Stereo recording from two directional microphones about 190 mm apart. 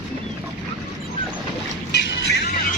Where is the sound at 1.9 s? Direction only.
60° left (ahead or behind).